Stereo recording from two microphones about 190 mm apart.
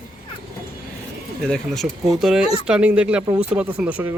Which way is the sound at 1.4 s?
Centre (ahead or behind).